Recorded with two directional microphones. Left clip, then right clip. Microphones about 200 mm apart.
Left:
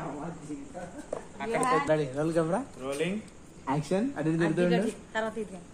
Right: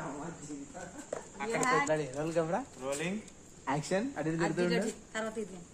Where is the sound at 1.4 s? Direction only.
65° right (ahead or behind).